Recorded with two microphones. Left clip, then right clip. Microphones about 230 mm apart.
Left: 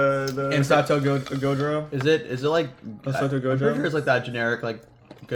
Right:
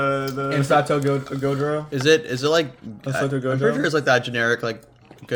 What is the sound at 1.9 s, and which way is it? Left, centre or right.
Speech, right.